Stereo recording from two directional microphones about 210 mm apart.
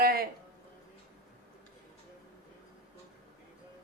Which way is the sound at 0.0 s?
45° right (ahead or behind).